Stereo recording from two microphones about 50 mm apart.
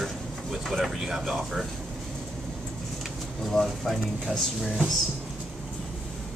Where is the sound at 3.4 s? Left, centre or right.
Centre.